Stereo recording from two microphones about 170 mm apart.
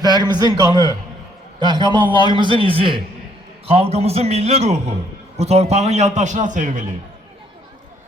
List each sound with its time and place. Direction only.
0.0 s a man's voice: 25° right (ahead or behind); by 6.8 s 50° right (ahead or behind)